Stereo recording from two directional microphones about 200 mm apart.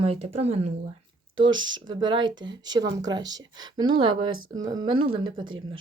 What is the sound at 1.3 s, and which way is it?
Speech, 70° right (ahead or behind).